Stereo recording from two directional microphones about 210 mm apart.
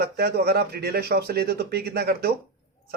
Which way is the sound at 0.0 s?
50° right (ahead or behind).